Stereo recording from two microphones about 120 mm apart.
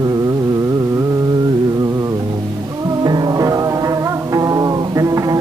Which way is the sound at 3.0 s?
35° right (ahead or behind).